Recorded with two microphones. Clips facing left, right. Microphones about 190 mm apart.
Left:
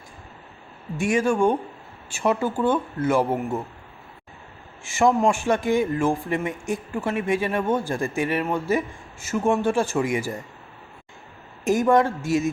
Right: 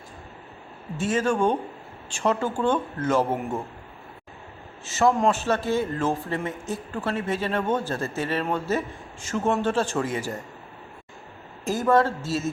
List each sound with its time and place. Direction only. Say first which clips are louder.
0.9 s a man's voice: left 2 dB; 10° left (ahead or behind)
4.8 s a man's voice: left 2 dB; 10° left (ahead or behind)
11.6 s a man's voice: left 2 dB; 15° left (ahead or behind)